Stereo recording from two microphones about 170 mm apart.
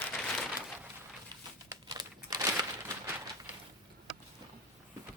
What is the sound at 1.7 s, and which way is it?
Crumpling, 25° right (ahead or behind).